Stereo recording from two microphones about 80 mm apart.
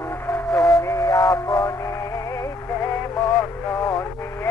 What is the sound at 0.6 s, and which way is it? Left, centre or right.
Music, left.